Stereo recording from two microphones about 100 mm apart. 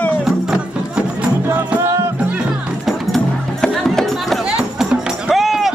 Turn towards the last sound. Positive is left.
turn(degrees=0)  # may be behind; listen again after turning